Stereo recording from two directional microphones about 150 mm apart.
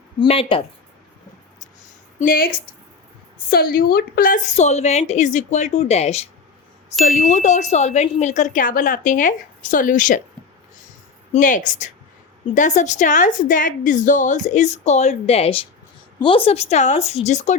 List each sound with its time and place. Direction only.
0.2 s speech: 35° left (ahead or behind)
2.1 s a woman's voice: 70° left (ahead or behind)
4.4 s a woman's voice: 50° left (ahead or behind)
7.0 s speech: 60° left (ahead or behind)
11.3 s a woman's voice: 60° left (ahead or behind)